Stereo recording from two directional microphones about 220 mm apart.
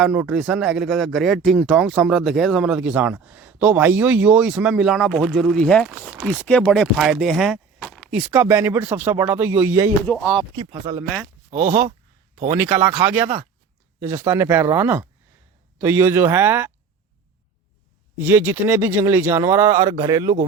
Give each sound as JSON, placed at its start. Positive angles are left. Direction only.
{"t": 0.0, "sound": "speech", "side_deg": -5}
{"t": 10.1, "sound": "speech", "side_deg": 5}
{"t": 10.9, "sound": "speech", "side_deg": -20}
{"t": 11.5, "sound": "speech", "side_deg": -40}
{"t": 14.0, "sound": "speech", "side_deg": -10}
{"t": 18.2, "sound": "speech", "side_deg": -10}